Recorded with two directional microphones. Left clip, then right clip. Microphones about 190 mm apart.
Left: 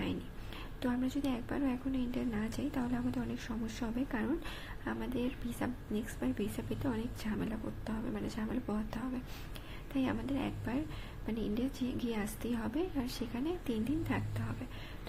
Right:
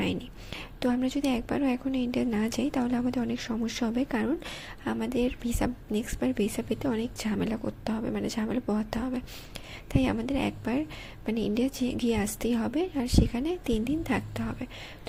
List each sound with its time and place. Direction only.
0.0 s a woman's voice: 40° right (ahead or behind)